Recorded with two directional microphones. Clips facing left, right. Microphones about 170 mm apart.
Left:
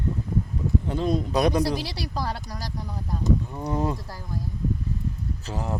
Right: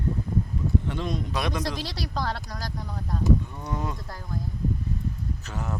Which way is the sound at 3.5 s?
35° left (ahead or behind).